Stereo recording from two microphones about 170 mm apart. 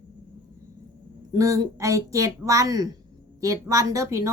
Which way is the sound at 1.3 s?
20° right (ahead or behind).